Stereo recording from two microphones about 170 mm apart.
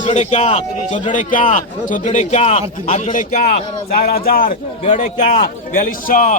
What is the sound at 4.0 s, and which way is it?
Speech, 60° left (ahead or behind).